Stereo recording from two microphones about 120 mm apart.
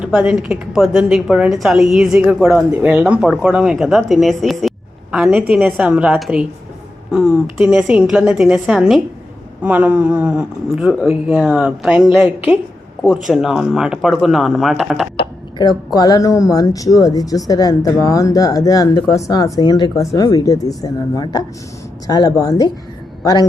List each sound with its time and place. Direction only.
0.0 s a woman's voice: 10° right (ahead or behind)
12.1 s speech: 15° right (ahead or behind)
13.2 s a woman's voice: 5° right (ahead or behind)
15.2 s a sound: 40° left (ahead or behind)
15.9 s speech: 30° left (ahead or behind)